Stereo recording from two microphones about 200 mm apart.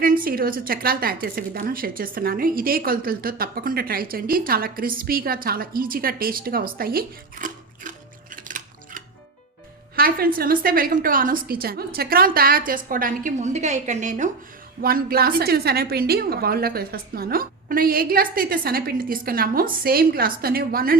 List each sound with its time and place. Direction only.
0.0 s a woman's voice: 45° right (ahead or behind)
8.4 s music: 40° right (ahead or behind)
9.9 s a woman's voice: 50° right (ahead or behind)
14.8 s a woman's voice: 50° right (ahead or behind)